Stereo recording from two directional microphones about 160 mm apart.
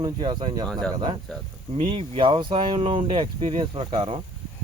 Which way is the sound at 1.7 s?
35° right (ahead or behind).